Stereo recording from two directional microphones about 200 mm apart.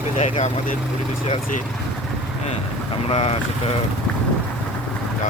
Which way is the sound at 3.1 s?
30° left (ahead or behind).